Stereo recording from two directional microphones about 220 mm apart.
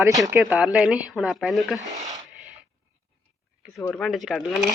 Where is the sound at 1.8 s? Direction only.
15° right (ahead or behind).